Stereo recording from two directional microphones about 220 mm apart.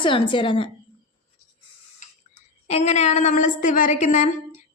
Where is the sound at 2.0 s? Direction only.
35° left (ahead or behind).